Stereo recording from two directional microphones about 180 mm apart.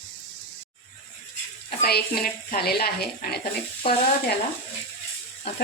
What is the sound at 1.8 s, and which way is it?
Speech, 60° left (ahead or behind).